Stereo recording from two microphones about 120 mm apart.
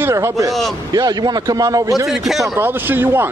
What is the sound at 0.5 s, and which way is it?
Speech, centre (ahead or behind).